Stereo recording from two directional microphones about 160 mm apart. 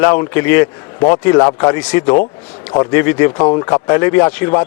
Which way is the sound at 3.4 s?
30° left (ahead or behind).